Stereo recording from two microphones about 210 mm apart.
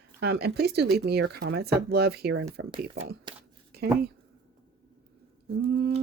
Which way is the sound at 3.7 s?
50° right (ahead or behind).